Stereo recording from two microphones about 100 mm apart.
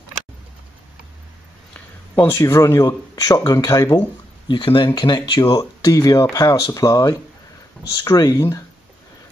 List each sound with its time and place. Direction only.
1.7 s speech: 25° left (ahead or behind)
4.5 s speech: 55° left (ahead or behind); by 8.5 s 35° left (ahead or behind)